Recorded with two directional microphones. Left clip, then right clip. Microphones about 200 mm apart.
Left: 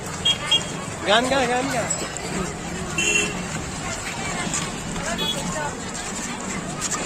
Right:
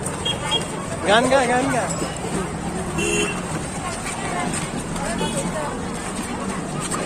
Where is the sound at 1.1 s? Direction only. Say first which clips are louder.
Right 3 dB; 25° left (ahead or behind).